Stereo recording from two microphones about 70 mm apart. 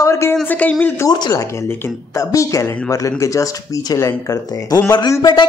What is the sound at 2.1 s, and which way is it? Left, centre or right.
Speech, left.